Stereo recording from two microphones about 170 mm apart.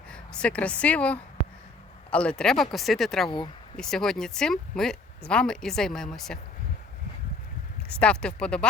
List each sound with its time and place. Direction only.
0.1 s speech: 5° left (ahead or behind)
3.2 s speech: 25° left (ahead or behind)
3.8 s speech: 5° left (ahead or behind)
7.9 s speech: 5° left (ahead or behind)